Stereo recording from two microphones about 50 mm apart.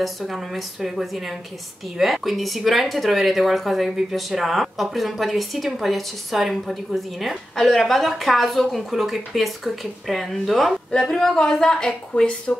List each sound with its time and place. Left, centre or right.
0.0 s speech: centre
10.9 s a woman's voice: centre